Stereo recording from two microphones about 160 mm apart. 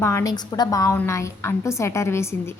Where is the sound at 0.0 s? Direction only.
20° left (ahead or behind).